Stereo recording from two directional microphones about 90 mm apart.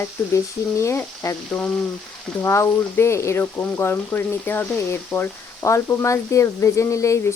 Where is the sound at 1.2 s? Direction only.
40° left (ahead or behind).